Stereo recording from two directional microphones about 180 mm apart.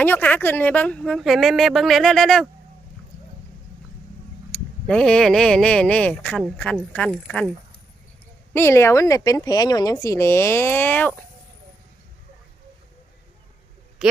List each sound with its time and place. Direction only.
0.0 s speech: 10° left (ahead or behind)
4.5 s speech: 5° left (ahead or behind)
8.5 s speech: 15° left (ahead or behind)
14.0 s a man's voice: centre (ahead or behind)